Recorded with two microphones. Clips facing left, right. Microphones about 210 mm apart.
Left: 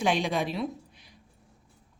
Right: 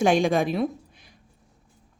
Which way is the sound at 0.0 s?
45° right (ahead or behind).